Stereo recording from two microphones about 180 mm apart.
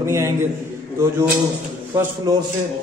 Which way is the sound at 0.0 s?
15° right (ahead or behind).